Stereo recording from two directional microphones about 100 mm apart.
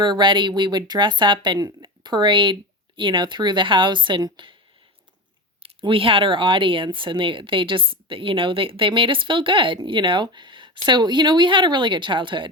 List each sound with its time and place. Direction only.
0.0 s speech: 50° right (ahead or behind)
5.8 s speech: 60° right (ahead or behind)